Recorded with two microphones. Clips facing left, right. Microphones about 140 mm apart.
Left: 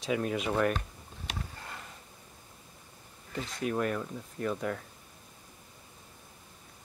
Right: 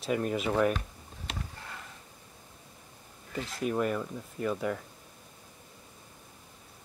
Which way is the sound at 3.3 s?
5° right (ahead or behind).